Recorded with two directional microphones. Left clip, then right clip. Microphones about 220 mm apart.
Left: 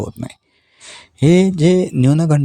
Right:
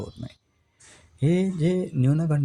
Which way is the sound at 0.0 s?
40° left (ahead or behind).